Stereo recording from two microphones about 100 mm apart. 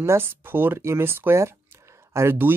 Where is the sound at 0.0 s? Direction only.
25° right (ahead or behind).